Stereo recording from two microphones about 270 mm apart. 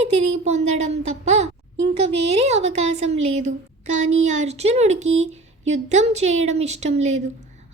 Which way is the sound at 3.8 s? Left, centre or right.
Right.